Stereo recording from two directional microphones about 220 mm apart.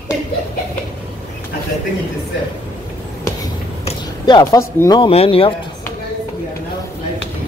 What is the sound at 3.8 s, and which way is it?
Speech, 20° left (ahead or behind).